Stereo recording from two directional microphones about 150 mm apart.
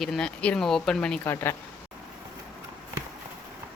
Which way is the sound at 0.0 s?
5° left (ahead or behind).